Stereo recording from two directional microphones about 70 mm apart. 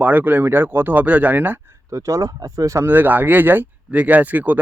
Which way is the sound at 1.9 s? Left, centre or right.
Right.